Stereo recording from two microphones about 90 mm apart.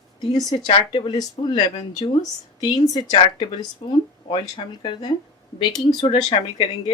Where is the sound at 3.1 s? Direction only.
60° left (ahead or behind).